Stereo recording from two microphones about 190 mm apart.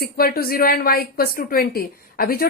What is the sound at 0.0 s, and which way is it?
Speech, 50° left (ahead or behind).